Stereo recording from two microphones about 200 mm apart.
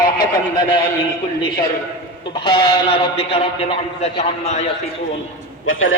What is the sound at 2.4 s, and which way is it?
A man's voice, 25° left (ahead or behind).